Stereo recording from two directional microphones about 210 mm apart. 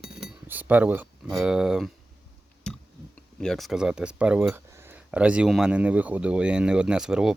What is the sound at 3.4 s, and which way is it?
Speech, centre (ahead or behind).